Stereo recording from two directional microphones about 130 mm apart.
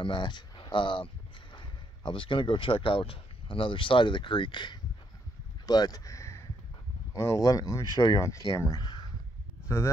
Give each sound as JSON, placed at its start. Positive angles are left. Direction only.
{"t": 0.0, "sound": "speech", "side_deg": 35}
{"t": 9.7, "sound": "speech", "side_deg": 20}